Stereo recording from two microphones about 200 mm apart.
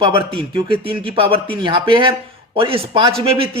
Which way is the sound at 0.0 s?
25° right (ahead or behind).